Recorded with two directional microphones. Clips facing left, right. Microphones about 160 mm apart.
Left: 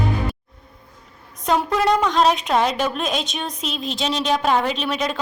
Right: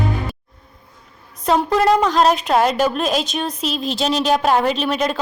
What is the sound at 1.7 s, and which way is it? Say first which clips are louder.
A woman's voice: right 3 dB; 5° right (ahead or behind).